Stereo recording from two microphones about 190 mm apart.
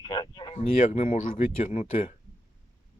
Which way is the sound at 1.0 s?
40° left (ahead or behind).